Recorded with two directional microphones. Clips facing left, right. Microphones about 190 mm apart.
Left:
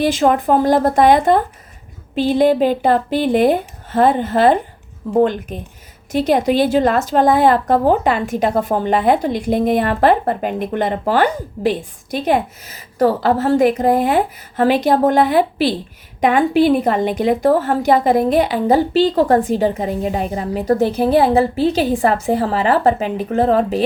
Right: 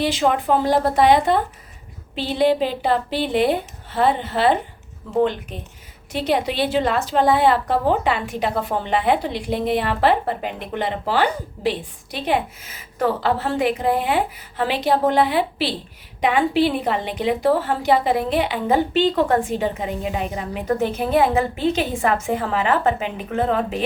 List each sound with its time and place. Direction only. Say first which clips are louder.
0.0 s a woman's voice: left 5 dB; 45° left (ahead or behind)